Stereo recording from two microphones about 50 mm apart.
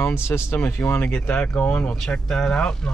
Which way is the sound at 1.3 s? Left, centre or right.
Left.